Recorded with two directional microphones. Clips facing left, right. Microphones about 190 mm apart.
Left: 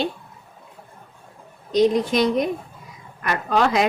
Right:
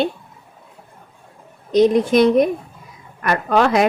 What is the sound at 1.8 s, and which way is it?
A woman's voice, 55° right (ahead or behind).